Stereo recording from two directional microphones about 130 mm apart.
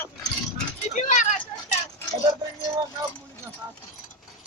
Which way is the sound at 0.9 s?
75° left (ahead or behind).